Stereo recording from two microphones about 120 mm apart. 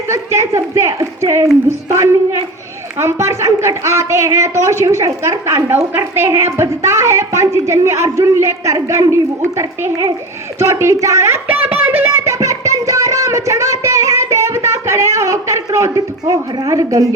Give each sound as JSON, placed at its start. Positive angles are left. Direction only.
{"t": 0.1, "sound": "a woman's voice", "side_deg": -25}